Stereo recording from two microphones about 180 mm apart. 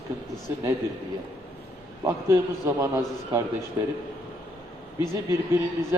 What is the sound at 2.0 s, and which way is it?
A man's voice, 15° right (ahead or behind).